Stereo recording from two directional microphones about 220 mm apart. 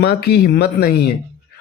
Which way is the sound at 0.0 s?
45° left (ahead or behind).